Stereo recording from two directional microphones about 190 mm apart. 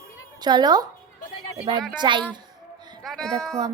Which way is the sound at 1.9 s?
25° right (ahead or behind).